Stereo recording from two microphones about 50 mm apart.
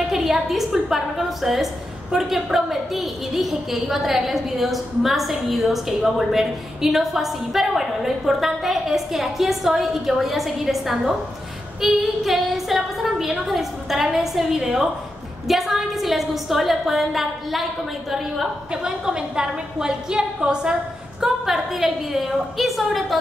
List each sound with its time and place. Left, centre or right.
0.1 s a woman's voice: centre
18.7 s a woman's voice: centre